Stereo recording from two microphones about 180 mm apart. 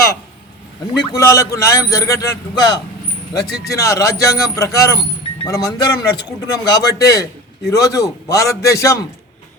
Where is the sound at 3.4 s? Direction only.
60° left (ahead or behind).